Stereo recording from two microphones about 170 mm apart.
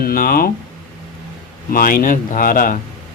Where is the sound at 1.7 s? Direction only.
55° left (ahead or behind).